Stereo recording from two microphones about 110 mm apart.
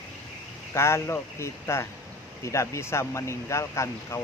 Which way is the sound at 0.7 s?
25° left (ahead or behind).